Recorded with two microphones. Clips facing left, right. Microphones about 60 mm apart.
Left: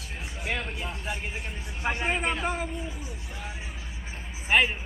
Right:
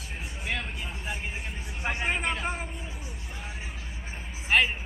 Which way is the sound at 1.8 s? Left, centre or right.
Centre.